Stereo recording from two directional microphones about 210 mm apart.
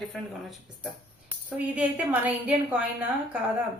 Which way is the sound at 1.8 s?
5° right (ahead or behind).